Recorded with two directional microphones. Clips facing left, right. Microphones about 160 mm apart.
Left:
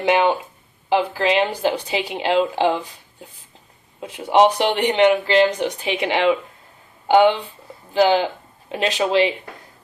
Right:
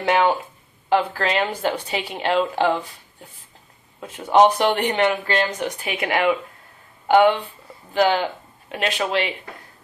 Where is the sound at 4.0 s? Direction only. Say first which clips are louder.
Even; 10° left (ahead or behind).